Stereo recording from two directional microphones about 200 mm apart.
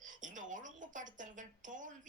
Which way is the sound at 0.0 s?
40° right (ahead or behind).